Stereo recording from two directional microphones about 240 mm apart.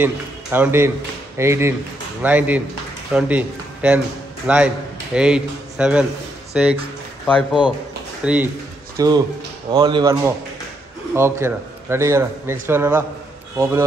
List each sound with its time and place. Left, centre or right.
0.0 s a man's voice: centre
7.2 s a man's voice: centre
8.2 s a man's voice: centre